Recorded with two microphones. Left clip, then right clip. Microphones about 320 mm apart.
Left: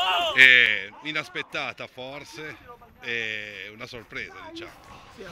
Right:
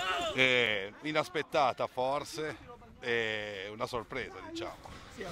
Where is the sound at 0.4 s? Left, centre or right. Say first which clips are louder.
Left 13 dB; centre.